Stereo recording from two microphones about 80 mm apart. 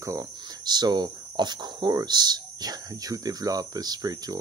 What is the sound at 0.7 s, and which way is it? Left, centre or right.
Speech, right.